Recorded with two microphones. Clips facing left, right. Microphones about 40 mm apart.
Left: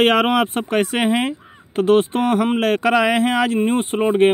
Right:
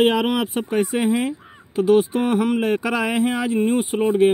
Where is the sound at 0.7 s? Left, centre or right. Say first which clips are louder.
Left 1 dB; left.